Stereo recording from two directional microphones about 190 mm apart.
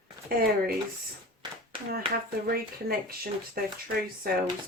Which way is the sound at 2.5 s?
50° right (ahead or behind).